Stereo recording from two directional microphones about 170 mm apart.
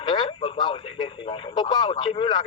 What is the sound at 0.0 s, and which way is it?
Speech, 30° left (ahead or behind).